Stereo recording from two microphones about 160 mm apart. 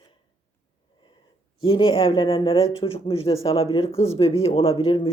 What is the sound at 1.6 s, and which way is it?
Speech, 35° left (ahead or behind).